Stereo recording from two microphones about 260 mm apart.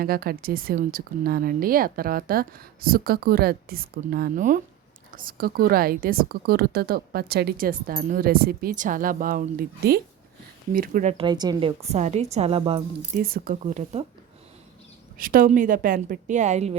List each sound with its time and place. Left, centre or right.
0.0 s a woman's voice: right
11.2 s a woman's voice: centre
13.1 s a woman's voice: right
15.2 s a woman's voice: right